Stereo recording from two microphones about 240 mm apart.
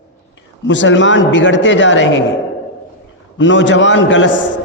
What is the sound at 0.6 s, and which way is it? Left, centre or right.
A man's voice, left.